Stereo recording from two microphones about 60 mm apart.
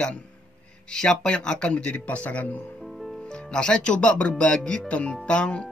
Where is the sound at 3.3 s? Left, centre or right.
Centre.